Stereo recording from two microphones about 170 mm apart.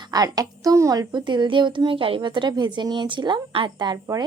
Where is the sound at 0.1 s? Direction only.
25° right (ahead or behind).